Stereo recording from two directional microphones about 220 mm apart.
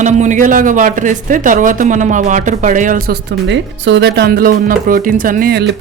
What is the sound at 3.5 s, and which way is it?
Speech, 50° right (ahead or behind).